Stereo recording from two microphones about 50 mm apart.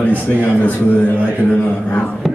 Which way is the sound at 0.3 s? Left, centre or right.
Left.